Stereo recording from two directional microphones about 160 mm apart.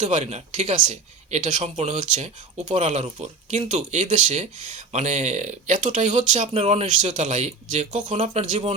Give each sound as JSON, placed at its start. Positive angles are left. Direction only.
{"t": 0.0, "sound": "speech", "side_deg": -45}